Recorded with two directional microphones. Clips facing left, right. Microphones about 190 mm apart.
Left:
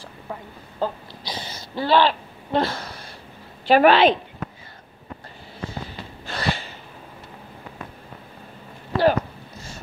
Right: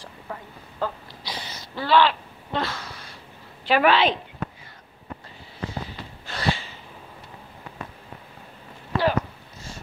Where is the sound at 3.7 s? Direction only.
40° left (ahead or behind).